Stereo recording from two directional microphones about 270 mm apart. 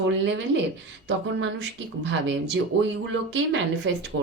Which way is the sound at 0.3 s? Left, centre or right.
Right.